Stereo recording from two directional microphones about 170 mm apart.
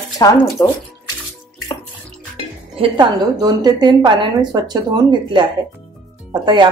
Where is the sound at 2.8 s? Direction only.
25° right (ahead or behind).